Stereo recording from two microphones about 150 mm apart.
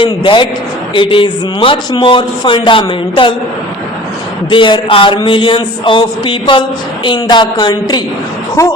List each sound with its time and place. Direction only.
0.0 s speech: 30° left (ahead or behind)
4.4 s speech: 30° left (ahead or behind)